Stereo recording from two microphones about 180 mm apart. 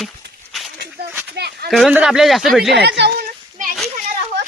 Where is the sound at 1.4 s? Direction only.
70° right (ahead or behind).